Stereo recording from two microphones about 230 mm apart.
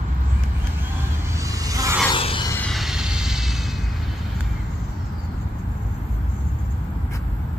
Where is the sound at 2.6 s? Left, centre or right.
Centre.